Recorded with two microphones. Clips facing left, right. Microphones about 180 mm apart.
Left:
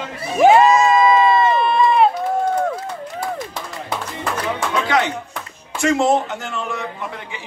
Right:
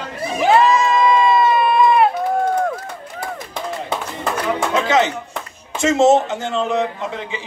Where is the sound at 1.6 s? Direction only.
5° right (ahead or behind).